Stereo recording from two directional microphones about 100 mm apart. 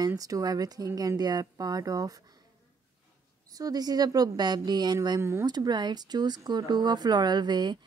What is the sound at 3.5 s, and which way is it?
Speech, 40° right (ahead or behind).